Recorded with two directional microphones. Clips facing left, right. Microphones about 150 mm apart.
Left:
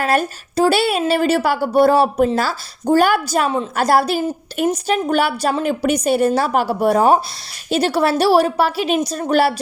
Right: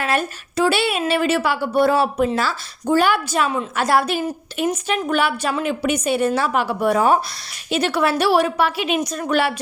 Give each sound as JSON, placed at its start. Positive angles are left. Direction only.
{"t": 0.0, "sound": "a woman's voice", "side_deg": 40}